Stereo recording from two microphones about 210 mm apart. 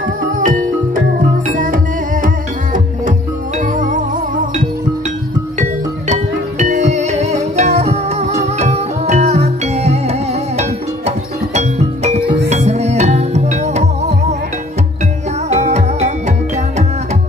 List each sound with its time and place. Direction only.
0.4 s music: 40° right (ahead or behind)
5.6 s music: 35° right (ahead or behind)
15.5 s music: 30° right (ahead or behind)